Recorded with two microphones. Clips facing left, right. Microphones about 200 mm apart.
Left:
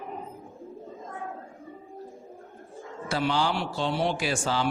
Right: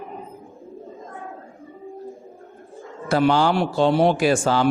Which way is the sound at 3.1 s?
50° right (ahead or behind).